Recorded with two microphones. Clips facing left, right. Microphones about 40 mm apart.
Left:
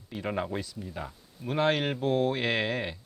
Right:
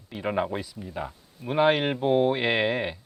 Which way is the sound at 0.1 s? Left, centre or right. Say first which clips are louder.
Right 4 dB; centre.